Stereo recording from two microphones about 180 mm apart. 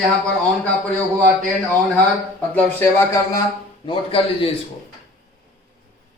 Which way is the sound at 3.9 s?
30° left (ahead or behind).